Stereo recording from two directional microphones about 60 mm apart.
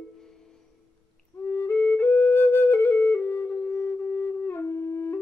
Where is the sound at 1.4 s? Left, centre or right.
Left.